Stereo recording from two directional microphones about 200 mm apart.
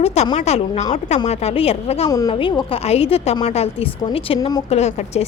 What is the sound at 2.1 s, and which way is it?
A woman's voice, 20° left (ahead or behind).